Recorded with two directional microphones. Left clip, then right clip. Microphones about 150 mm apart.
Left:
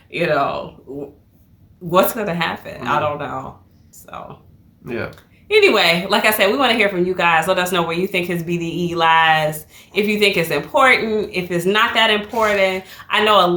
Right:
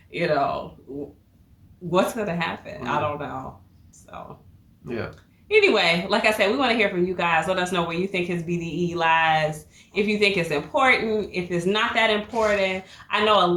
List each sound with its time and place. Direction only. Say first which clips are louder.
0.1 s a woman's voice: left 5 dB; 25° left (ahead or behind)
4.9 s speech: left 5 dB; 5° right (ahead or behind)
5.5 s a woman's voice: left 5 dB; 30° left (ahead or behind)